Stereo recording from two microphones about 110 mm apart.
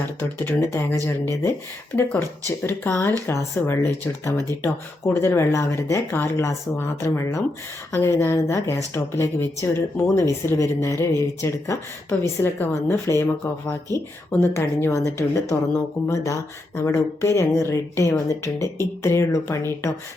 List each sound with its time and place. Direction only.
0.2 s speech: 20° left (ahead or behind)
2.6 s speech: 20° left (ahead or behind)